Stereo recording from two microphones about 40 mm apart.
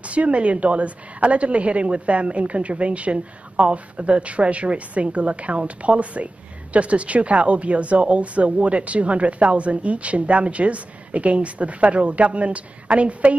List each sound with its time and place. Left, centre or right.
0.1 s speech: right